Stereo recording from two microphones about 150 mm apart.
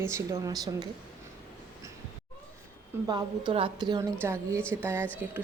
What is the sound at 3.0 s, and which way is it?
Speech, 30° right (ahead or behind).